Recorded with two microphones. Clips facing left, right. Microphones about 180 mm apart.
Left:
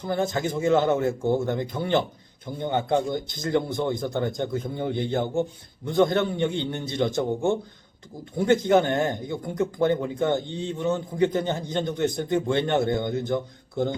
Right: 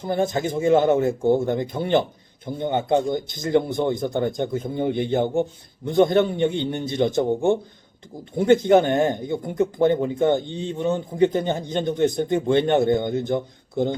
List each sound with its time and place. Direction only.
0.0 s speech: 20° right (ahead or behind)